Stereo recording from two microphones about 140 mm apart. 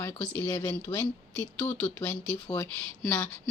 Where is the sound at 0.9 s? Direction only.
40° left (ahead or behind).